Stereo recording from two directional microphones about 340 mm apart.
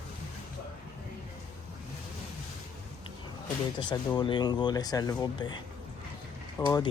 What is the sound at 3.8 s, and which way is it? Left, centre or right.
Speech, centre.